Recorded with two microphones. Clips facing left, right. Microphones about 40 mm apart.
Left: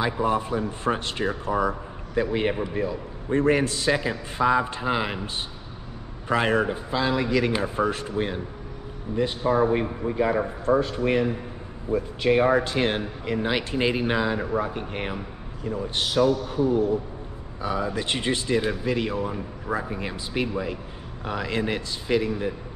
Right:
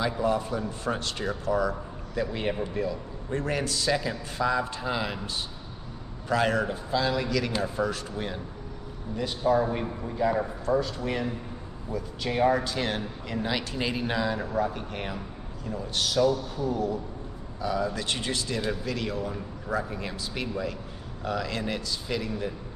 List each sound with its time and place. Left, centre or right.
0.0 s a man's voice: left